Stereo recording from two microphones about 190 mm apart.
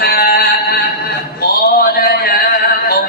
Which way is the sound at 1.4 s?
55° left (ahead or behind).